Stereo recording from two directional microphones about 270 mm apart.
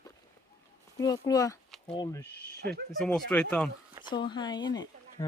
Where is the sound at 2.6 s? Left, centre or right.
Right.